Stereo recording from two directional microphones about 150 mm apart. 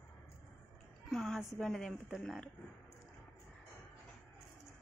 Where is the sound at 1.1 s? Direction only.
5° left (ahead or behind).